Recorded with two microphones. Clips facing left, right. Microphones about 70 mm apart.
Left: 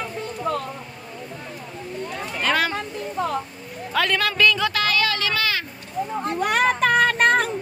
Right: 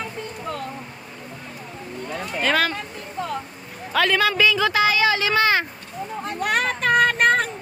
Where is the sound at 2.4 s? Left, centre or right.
Centre.